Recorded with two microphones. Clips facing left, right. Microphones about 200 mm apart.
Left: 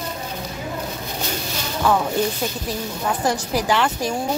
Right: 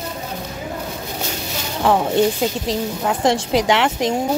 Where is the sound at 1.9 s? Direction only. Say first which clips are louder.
Right 4 dB; 25° right (ahead or behind).